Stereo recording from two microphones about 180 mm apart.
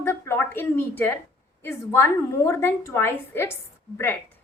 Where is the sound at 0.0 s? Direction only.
10° left (ahead or behind).